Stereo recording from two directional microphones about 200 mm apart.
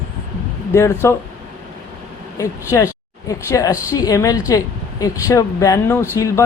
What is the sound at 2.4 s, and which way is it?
A woman's voice, 15° left (ahead or behind).